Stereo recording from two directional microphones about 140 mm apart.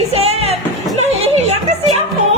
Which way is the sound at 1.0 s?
50° right (ahead or behind).